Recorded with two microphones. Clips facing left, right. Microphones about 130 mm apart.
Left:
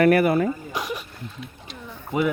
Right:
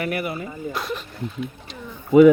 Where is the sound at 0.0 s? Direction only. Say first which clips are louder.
Left 9 dB; 55° left (ahead or behind).